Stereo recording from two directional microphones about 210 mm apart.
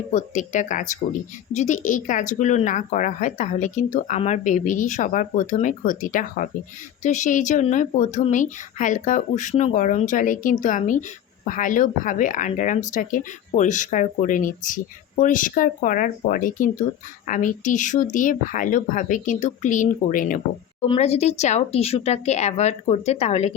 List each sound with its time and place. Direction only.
0.1 s speech: 35° left (ahead or behind)
20.8 s speech: 25° left (ahead or behind)